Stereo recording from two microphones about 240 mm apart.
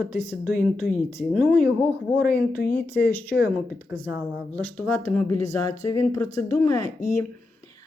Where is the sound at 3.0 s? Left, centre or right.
Left.